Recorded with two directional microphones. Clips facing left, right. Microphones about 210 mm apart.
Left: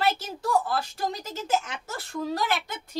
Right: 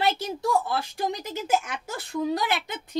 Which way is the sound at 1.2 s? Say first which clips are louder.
Right 1 dB; 10° right (ahead or behind).